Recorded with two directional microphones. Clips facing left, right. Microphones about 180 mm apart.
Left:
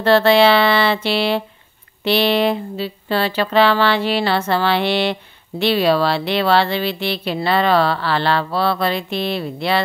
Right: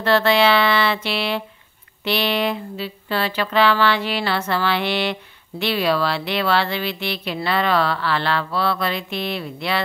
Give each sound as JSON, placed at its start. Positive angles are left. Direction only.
{"t": 0.0, "sound": "speech", "side_deg": 30}